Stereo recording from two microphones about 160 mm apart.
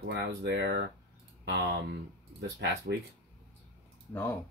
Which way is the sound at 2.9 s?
80° right.